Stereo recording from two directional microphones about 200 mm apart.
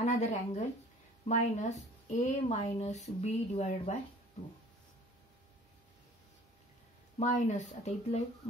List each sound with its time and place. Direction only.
0.0 s speech: 35° left (ahead or behind)
7.2 s speech: 35° left (ahead or behind)